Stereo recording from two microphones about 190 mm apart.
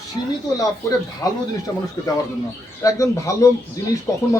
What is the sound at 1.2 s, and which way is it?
Speech, 20° left (ahead or behind).